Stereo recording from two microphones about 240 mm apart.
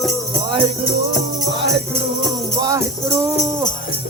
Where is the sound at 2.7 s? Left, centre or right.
Centre.